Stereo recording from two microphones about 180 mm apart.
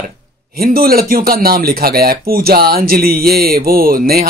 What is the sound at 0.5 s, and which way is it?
Speech, 55° right (ahead or behind).